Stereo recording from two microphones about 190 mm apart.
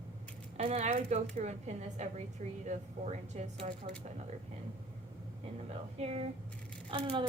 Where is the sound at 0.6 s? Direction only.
35° right (ahead or behind).